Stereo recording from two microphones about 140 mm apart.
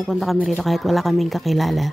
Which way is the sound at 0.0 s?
Centre (ahead or behind).